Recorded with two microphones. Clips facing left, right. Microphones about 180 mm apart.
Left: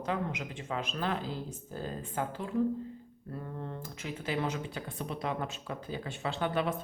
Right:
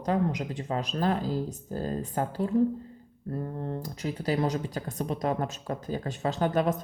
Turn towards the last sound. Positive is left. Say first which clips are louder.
# right 5 dB
turn(degrees=-40)  # may be behind; listen again after turning